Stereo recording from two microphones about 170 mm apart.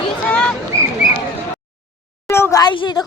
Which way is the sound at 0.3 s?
5° left (ahead or behind).